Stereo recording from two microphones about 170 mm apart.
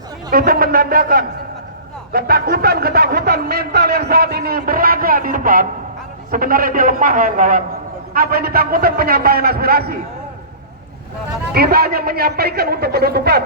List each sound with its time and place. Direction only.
0.3 s speech: 60° right (ahead or behind)
11.5 s a man's voice: 65° right (ahead or behind)